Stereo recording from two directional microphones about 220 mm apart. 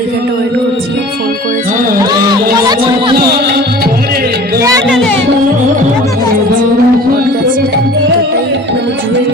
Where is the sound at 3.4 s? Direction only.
45° right (ahead or behind).